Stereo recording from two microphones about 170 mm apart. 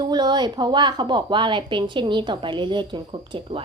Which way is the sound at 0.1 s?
25° right (ahead or behind).